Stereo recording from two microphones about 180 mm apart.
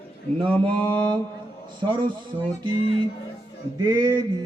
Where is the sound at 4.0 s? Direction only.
25° right (ahead or behind).